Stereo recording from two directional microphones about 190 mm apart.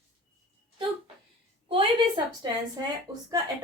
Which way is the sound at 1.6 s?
30° right (ahead or behind).